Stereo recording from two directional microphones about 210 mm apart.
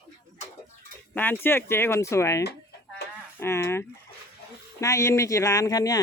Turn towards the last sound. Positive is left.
turn(degrees=15)  # may be behind; listen again after turning